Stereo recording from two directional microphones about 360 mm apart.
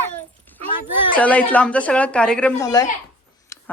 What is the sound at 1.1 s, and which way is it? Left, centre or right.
Speech, centre.